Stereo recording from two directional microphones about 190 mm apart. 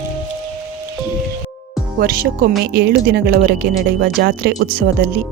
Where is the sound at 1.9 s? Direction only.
50° right (ahead or behind).